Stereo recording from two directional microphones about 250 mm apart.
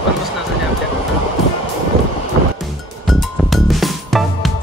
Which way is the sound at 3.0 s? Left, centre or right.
Centre.